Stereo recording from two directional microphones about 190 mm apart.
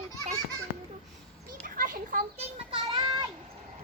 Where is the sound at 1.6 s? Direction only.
45° right (ahead or behind).